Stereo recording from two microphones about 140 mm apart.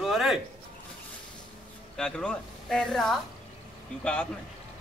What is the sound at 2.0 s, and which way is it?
A man's voice, 5° left (ahead or behind).